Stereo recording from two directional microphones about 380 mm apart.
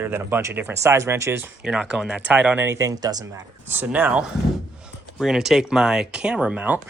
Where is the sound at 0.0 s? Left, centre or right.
Centre.